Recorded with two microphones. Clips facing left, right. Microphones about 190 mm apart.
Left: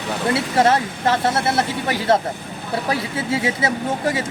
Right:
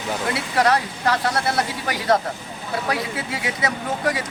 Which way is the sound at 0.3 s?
25° left (ahead or behind).